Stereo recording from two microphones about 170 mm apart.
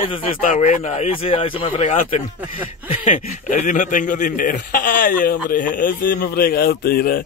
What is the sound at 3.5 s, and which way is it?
A man's voice, 45° left (ahead or behind).